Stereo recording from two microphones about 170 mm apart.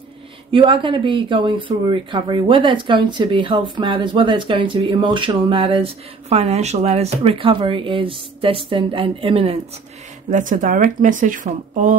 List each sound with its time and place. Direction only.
0.5 s speech: 30° right (ahead or behind)
10.3 s speech: 50° right (ahead or behind)